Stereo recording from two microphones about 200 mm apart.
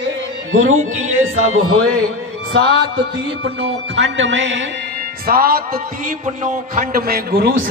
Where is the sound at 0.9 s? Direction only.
90° right.